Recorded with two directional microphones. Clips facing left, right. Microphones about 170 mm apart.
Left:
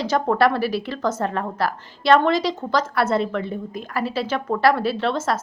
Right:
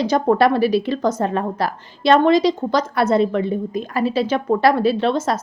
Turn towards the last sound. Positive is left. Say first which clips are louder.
# right 4 dB
turn(degrees=-15)  # may be behind; listen again after turning